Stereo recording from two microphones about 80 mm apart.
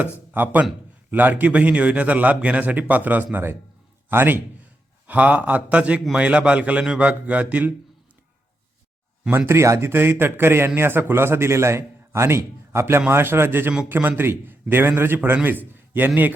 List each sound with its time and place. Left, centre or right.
0.0 s a man's voice: right
9.5 s a man's voice: right